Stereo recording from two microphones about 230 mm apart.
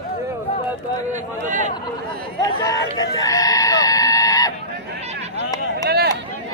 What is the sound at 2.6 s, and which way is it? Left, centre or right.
Speech, centre.